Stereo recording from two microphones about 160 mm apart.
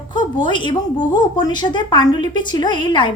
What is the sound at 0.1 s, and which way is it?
A woman's voice, 30° left (ahead or behind).